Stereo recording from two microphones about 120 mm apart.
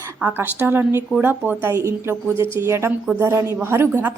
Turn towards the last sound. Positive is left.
turn(degrees=-20)  # may be behind; listen again after turning